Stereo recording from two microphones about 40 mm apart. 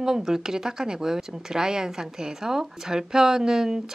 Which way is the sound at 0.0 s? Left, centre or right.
Centre.